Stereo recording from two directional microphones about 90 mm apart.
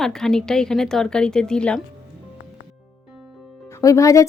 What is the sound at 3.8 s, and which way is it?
Speech, 35° left (ahead or behind).